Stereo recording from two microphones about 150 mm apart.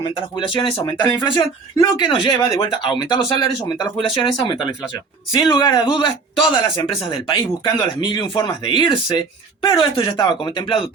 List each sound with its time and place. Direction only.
0.3 s a man's voice: 35° left (ahead or behind)